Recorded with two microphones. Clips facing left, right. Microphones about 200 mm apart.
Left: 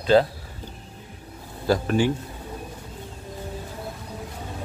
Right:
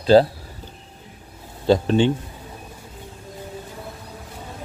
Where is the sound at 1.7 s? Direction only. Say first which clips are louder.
Right 4 dB; 25° right (ahead or behind).